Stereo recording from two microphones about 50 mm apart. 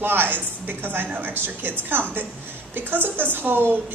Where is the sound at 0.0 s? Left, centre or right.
Right.